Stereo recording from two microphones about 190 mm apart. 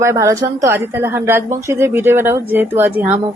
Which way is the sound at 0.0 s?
15° right (ahead or behind).